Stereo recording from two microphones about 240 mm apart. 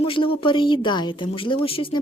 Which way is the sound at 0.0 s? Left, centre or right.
Left.